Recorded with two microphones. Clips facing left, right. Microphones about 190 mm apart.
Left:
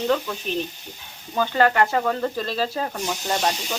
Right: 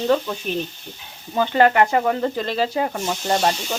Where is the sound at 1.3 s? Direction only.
20° right (ahead or behind).